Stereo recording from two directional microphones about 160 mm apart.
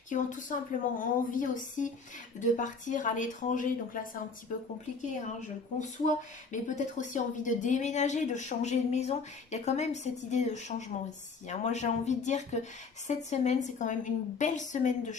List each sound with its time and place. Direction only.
0.1 s a woman's voice: 55° left (ahead or behind)
6.5 s speech: 50° left (ahead or behind)